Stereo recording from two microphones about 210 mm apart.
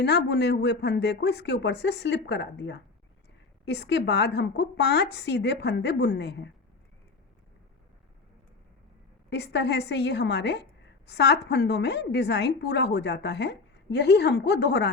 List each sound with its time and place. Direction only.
0.0 s a woman's voice: 55° left (ahead or behind)
9.3 s a woman's voice: 55° left (ahead or behind)